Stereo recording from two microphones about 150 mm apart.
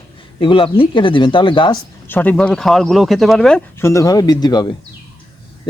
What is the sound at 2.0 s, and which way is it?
Speech, 10° left (ahead or behind).